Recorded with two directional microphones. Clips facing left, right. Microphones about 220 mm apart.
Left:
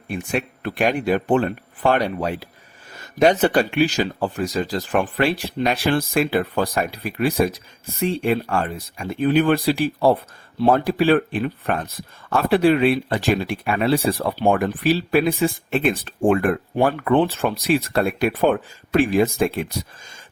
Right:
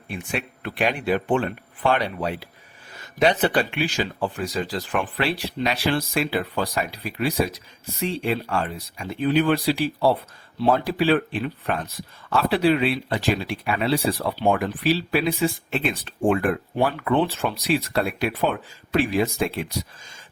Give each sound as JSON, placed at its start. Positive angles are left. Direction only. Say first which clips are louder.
{"t": 0.1, "sound": "speech", "louder": "left 5 dB", "side_deg": 45}